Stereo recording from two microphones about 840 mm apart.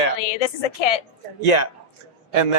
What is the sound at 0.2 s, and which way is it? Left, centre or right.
Speech, left.